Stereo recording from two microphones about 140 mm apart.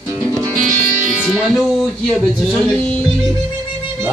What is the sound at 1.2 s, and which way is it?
Music, centre (ahead or behind).